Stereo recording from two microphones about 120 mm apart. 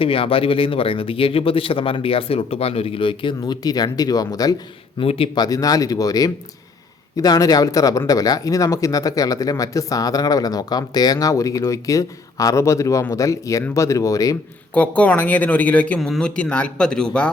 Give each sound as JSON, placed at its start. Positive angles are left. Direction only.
{"t": 0.0, "sound": "speech", "side_deg": 50}
{"t": 3.4, "sound": "speech", "side_deg": 35}
{"t": 4.9, "sound": "speech", "side_deg": 50}
{"t": 5.3, "sound": "speech", "side_deg": 30}
{"t": 14.7, "sound": "speech", "side_deg": 10}